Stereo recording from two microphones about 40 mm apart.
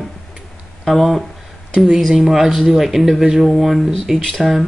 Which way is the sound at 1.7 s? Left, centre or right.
Centre.